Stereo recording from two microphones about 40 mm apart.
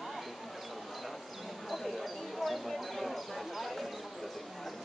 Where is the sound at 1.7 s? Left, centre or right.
Centre.